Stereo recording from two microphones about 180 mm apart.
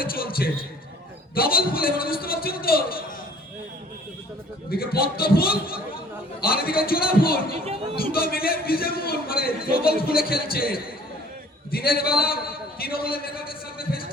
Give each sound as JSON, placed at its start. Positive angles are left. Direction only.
{"t": 0.0, "sound": "a man's voice", "side_deg": 55}
{"t": 4.7, "sound": "a man's voice", "side_deg": 55}